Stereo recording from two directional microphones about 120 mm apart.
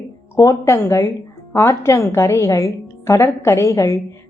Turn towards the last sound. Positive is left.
turn(degrees=25)  # may be behind; listen again after turning